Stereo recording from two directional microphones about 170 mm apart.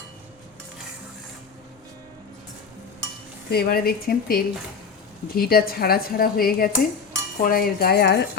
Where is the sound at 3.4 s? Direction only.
65° left (ahead or behind).